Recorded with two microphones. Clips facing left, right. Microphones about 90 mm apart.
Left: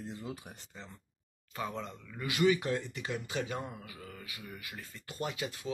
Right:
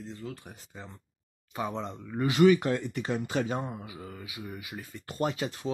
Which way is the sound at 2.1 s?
35° right (ahead or behind).